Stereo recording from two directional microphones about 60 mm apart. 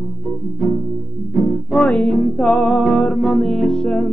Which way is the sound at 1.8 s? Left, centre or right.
Left.